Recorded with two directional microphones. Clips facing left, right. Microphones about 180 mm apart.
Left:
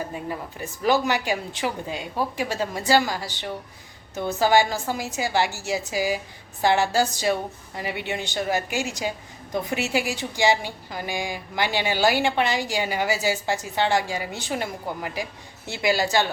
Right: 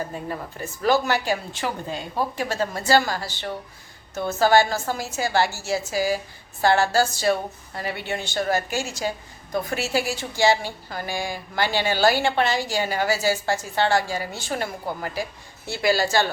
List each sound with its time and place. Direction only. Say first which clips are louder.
0.1 s a woman's voice: even; 10° left (ahead or behind)